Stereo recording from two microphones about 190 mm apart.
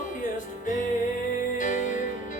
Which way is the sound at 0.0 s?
40° left (ahead or behind).